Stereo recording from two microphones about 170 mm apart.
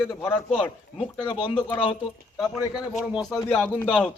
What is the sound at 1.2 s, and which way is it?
Speech, 30° left (ahead or behind).